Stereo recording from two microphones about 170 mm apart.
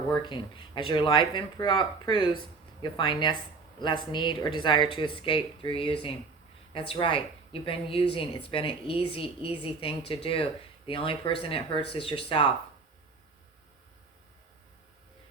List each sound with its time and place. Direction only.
0.2 s speech: 25° left (ahead or behind)